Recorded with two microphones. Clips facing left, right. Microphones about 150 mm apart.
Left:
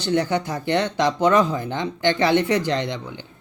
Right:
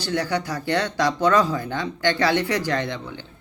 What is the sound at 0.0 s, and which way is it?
Speech, 20° left (ahead or behind).